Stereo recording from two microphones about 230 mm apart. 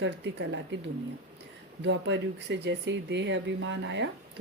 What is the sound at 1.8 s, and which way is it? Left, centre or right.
Speech, right.